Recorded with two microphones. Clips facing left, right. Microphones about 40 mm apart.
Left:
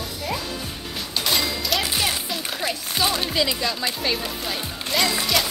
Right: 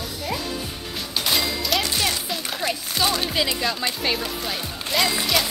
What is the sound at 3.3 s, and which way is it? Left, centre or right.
A woman's voice, centre.